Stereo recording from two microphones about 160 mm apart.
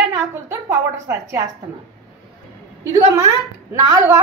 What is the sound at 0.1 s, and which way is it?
A woman's voice, 15° right (ahead or behind).